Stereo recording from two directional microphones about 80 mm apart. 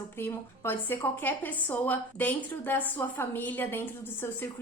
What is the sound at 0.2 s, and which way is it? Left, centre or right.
A woman's voice, left.